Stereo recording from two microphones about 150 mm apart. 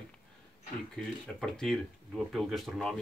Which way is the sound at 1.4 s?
5° left (ahead or behind).